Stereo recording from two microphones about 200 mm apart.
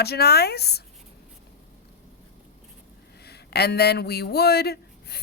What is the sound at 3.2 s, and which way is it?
Speech, 55° left (ahead or behind).